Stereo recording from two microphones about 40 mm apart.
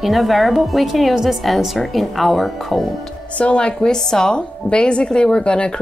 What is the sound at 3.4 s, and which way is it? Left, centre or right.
A woman's voice, left.